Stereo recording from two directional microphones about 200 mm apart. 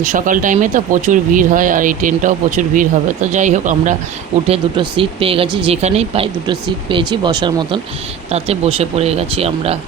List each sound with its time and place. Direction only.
0.0 s speech: 40° right (ahead or behind)
4.4 s speech: 30° right (ahead or behind)